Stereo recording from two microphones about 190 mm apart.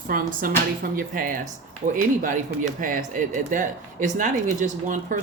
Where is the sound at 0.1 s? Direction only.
50° right (ahead or behind).